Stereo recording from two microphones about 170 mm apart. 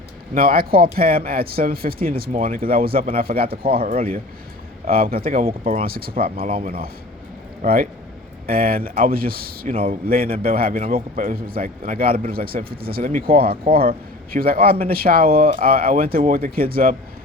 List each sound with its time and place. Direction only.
0.3 s a man's voice: 60° right (ahead or behind)
4.9 s a man's voice: 60° right (ahead or behind)